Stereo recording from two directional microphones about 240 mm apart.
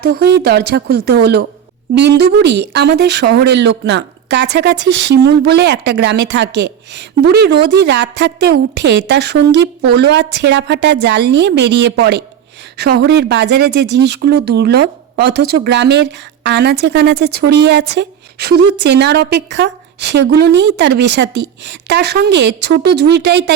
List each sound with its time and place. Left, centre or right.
0.0 s a woman's voice: right